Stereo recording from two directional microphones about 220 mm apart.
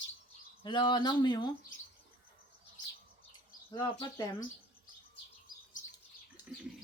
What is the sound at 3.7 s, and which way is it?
Speech, 20° left (ahead or behind).